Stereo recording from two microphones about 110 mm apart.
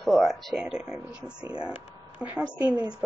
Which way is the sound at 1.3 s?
40° right (ahead or behind).